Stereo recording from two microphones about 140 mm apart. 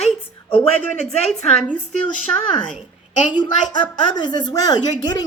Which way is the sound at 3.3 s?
35° left (ahead or behind).